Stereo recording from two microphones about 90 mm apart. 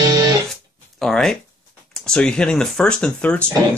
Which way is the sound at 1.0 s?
5° left (ahead or behind).